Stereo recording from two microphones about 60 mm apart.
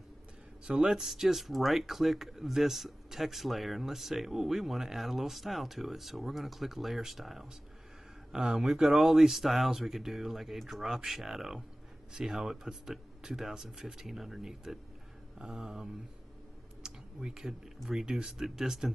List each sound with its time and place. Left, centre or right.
0.7 s speech: centre
1.0 s speech: centre
8.5 s speech: centre
16.8 s a sound: centre
17.8 s speech: centre